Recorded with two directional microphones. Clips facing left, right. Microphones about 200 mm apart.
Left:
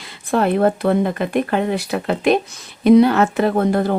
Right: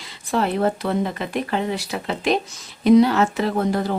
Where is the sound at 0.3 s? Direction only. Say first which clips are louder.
Left 5 dB; 55° left (ahead or behind).